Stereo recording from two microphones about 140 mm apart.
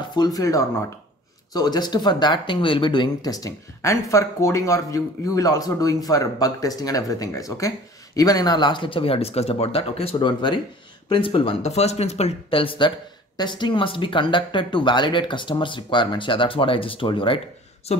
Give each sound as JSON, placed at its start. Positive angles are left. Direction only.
{"t": 0.1, "sound": "speech", "side_deg": 30}
{"t": 17.9, "sound": "speech", "side_deg": 50}